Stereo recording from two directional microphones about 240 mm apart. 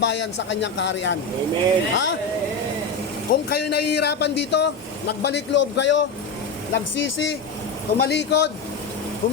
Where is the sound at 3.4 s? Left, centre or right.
Left.